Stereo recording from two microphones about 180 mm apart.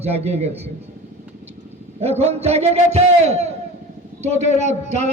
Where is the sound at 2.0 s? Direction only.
35° right (ahead or behind).